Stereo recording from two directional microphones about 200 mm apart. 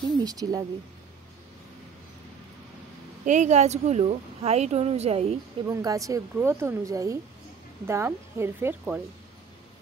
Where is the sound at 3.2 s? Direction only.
35° right (ahead or behind).